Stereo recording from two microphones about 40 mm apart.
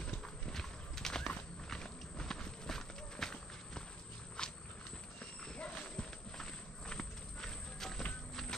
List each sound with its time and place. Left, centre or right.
0.5 s horse: centre
4.4 s walk: left
5.6 s a sound: left
6.3 s walk: centre